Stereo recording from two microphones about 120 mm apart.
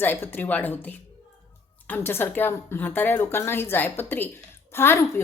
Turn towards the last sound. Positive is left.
turn(degrees=20)  # may be behind; listen again after turning